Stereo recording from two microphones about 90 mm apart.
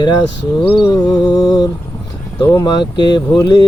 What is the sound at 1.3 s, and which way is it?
Mantra, 50° left (ahead or behind).